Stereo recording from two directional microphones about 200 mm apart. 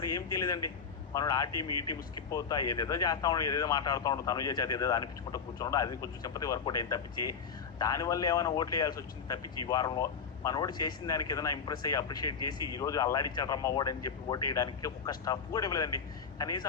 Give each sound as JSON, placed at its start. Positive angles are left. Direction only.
{"t": 0.0, "sound": "speech", "side_deg": 20}